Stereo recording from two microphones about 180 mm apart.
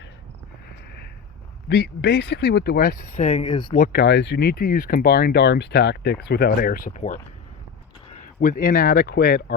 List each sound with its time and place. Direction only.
1.7 s speech: 70° left (ahead or behind); by 3.4 s 45° left (ahead or behind)
3.4 s speech: 25° left (ahead or behind)
3.8 s speech: 65° left (ahead or behind)